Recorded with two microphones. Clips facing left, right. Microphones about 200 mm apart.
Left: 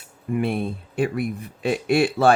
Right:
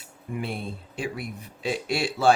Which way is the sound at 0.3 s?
55° left (ahead or behind).